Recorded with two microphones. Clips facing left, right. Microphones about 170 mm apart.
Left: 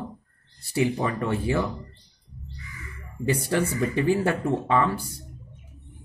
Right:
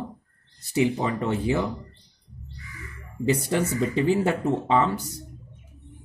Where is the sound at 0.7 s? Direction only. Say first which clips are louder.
Right 1 dB; 20° right (ahead or behind).